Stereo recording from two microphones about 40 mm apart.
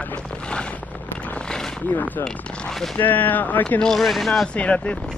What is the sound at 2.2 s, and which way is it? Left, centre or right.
Speech, left.